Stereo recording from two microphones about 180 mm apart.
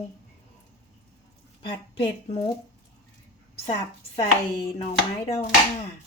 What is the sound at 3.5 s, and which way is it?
Speech, 30° left (ahead or behind).